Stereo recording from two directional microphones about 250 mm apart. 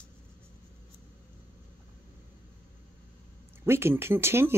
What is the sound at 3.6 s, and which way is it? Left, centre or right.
Speech, centre.